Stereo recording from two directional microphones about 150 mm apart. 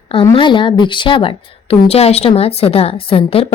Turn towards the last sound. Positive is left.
turn(degrees=40)  # may be behind; listen again after turning